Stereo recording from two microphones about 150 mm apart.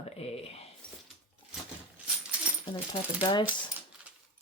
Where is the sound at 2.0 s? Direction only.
10° right (ahead or behind).